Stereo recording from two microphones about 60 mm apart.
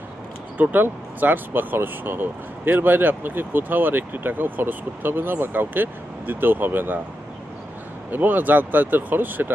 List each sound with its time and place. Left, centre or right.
0.5 s speech: right
8.1 s speech: right